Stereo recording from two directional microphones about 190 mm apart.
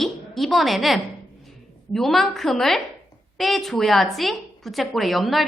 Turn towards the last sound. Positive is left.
turn(degrees=0)  # may be behind; listen again after turning